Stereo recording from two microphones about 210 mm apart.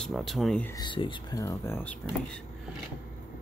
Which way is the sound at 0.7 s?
20° left (ahead or behind).